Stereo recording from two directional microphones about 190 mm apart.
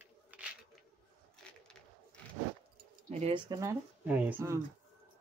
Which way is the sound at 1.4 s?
5° left (ahead or behind).